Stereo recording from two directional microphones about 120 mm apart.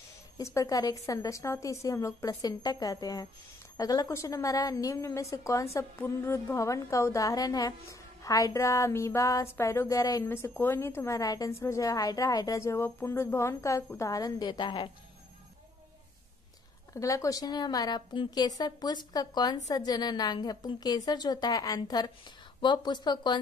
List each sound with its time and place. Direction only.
0.4 s a woman's voice: 25° left (ahead or behind)
16.9 s a woman's voice: 25° left (ahead or behind)